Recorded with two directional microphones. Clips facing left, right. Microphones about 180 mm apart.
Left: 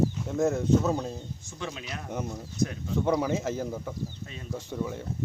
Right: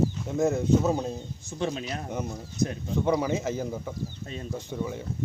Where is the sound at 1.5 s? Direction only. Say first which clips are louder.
Right 7 dB; 35° right (ahead or behind).